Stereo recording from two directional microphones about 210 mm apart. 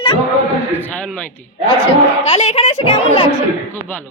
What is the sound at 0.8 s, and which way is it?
Speech, 5° left (ahead or behind).